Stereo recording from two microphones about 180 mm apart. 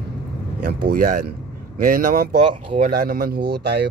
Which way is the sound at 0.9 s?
55° right (ahead or behind).